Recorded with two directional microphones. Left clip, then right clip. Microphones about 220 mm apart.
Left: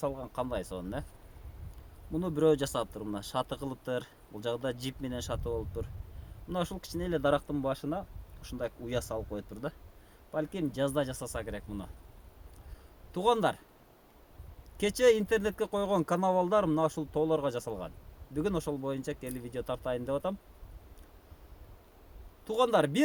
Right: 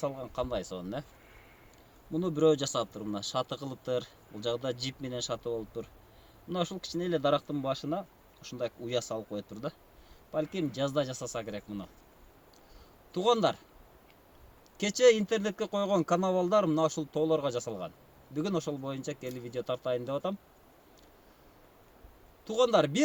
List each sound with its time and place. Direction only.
0.0 s speech: 15° left (ahead or behind)
2.1 s speech: 15° left (ahead or behind)
13.1 s speech: 20° left (ahead or behind)
14.8 s speech: 20° left (ahead or behind)
22.4 s speech: 20° left (ahead or behind)